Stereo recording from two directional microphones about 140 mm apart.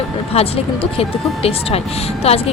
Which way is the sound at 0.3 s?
45° left (ahead or behind).